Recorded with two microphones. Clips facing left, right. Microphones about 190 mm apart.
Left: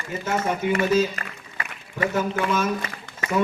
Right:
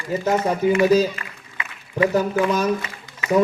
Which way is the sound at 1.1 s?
40° left (ahead or behind).